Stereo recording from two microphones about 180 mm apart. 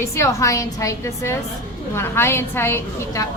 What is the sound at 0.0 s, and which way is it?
A woman's voice, 15° left (ahead or behind).